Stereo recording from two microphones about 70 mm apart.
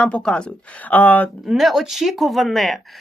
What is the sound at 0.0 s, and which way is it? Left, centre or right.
Speech, centre.